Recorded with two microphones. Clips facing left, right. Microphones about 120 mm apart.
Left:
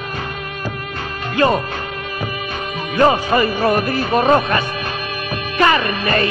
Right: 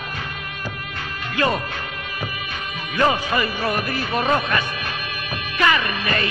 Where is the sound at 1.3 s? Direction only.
35° left (ahead or behind).